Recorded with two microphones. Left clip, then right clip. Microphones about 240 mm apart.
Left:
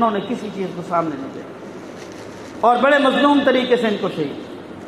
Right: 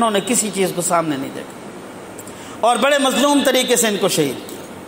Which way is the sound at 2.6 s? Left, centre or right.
Right.